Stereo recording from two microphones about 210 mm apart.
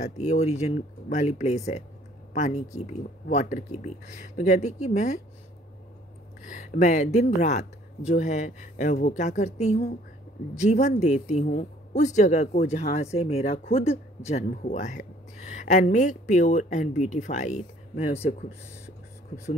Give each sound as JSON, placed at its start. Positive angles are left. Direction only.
{"t": 0.0, "sound": "speech", "side_deg": 35}
{"t": 6.4, "sound": "speech", "side_deg": 35}